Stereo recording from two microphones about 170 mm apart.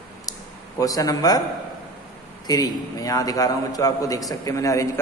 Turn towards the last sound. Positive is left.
turn(degrees=20)  # may be behind; listen again after turning